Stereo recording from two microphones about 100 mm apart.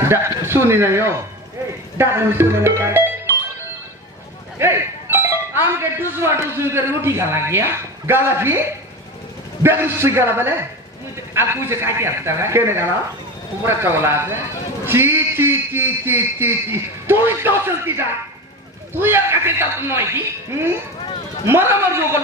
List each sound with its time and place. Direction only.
0.0 s a man's voice: 25° right (ahead or behind)
4.6 s speech: 25° right (ahead or behind)